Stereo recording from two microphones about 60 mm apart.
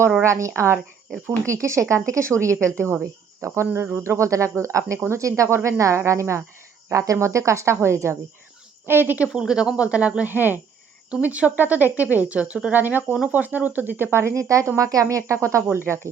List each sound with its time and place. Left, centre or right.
0.2 s speech: right
2.7 s speech: right
3.7 s speech: right
8.9 s speech: right
9.3 s speech: centre
10.2 s speech: right
11.1 s speech: right
14.8 s speech: right
15.7 s speech: right